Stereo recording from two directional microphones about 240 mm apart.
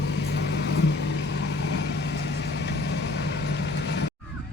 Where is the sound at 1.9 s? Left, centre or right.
Left.